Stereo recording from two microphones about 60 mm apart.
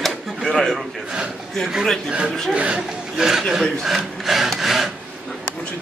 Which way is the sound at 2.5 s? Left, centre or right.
Centre.